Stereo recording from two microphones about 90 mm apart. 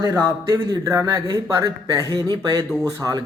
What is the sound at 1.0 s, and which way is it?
A man's voice, 45° right (ahead or behind).